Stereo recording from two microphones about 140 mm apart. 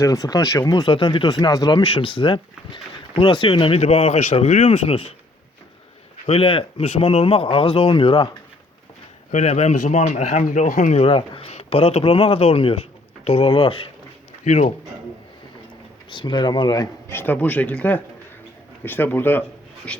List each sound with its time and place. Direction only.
0.0 s speech: 25° left (ahead or behind); by 5.1 s 45° left (ahead or behind)
6.2 s speech: 40° left (ahead or behind)
9.3 s speech: 50° left (ahead or behind)
14.4 s speech: 55° left (ahead or behind)
16.0 s speech: 35° left (ahead or behind)
17.1 s speech: 15° left (ahead or behind)